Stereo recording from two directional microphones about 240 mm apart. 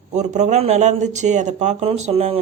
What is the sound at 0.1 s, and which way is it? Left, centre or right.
Speech, right.